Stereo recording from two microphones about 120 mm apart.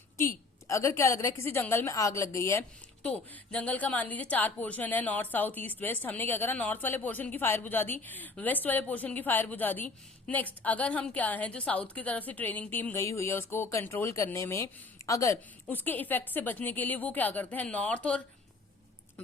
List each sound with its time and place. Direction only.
0.7 s a woman's voice: 25° left (ahead or behind)
3.0 s a woman's voice: 10° left (ahead or behind); by 15.4 s 25° left (ahead or behind)
15.7 s a woman's voice: 15° left (ahead or behind)